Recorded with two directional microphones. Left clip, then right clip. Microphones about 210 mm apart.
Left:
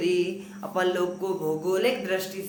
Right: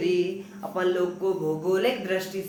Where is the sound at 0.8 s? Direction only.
30° left (ahead or behind).